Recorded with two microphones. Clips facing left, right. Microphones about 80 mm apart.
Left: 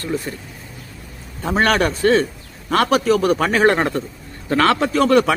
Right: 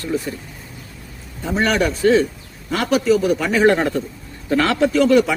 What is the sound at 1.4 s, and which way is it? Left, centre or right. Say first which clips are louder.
A man's voice: left 2 dB; left.